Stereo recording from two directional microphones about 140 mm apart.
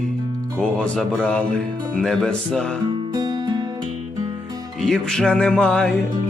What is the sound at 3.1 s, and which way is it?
Music, 30° right (ahead or behind).